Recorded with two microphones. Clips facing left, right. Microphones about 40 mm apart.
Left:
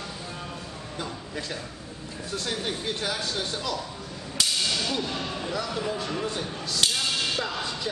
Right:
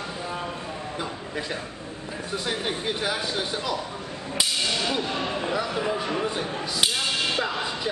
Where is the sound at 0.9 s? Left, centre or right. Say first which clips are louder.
Even; centre.